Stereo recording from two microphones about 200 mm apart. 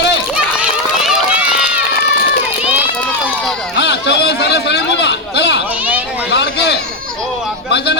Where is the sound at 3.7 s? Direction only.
60° left (ahead or behind).